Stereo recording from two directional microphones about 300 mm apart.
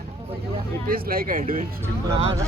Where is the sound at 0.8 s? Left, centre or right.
Right.